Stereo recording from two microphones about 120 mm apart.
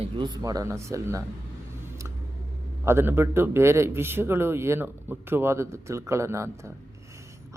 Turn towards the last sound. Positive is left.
turn(degrees=-25)  # may be behind; listen again after turning